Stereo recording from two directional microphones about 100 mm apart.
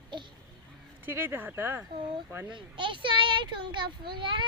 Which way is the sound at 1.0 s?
20° right (ahead or behind).